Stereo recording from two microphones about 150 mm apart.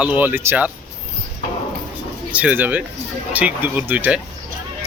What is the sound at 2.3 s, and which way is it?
Speech, 10° right (ahead or behind).